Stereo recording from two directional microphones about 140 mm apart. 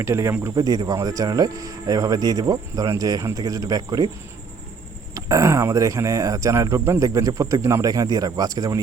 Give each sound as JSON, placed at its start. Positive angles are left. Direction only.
{"t": 0.0, "sound": "speech", "side_deg": -20}
{"t": 5.1, "sound": "speech", "side_deg": -25}